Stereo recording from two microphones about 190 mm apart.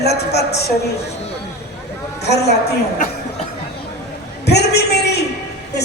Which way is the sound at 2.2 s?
60° left (ahead or behind).